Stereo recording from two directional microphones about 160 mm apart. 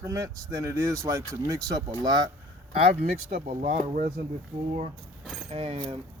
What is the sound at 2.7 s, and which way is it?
Speech, 35° right (ahead or behind).